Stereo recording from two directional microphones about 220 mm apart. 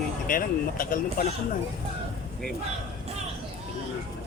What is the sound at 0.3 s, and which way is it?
Speech, 40° left (ahead or behind).